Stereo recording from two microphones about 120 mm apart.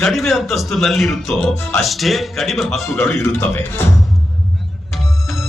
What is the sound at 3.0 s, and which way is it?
Speech, 15° left (ahead or behind).